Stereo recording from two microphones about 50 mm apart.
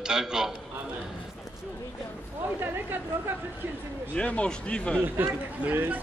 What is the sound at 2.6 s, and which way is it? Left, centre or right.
Speech, right.